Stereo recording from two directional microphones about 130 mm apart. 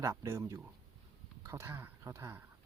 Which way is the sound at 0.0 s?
25° right (ahead or behind).